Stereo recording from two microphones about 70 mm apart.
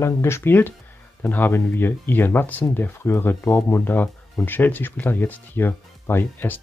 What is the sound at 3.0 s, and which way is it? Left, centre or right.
Speech, left.